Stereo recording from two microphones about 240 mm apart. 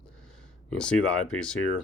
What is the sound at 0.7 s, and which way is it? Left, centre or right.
Speech, centre.